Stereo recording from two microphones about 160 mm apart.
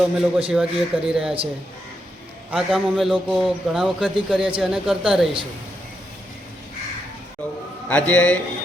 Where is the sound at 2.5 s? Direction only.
Centre (ahead or behind).